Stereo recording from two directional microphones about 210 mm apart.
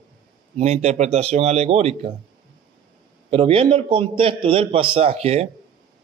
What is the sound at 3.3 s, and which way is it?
Speech, 25° right (ahead or behind).